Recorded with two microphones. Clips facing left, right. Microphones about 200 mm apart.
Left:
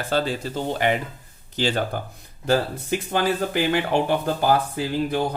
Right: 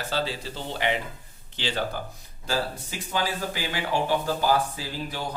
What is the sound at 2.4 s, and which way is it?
Speech, 55° left (ahead or behind).